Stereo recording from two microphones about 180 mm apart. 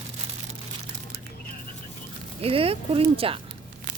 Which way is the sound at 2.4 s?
30° right (ahead or behind).